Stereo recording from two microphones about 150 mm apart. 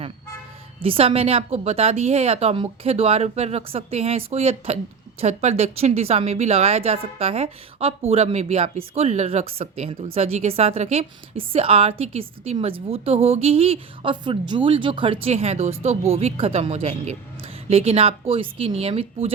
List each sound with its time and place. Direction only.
0.8 s a woman's voice: 40° right (ahead or behind)